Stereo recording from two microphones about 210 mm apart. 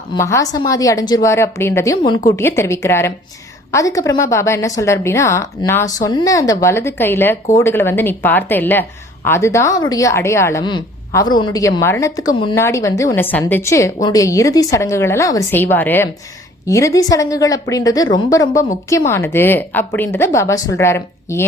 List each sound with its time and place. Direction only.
0.1 s speech: 15° left (ahead or behind)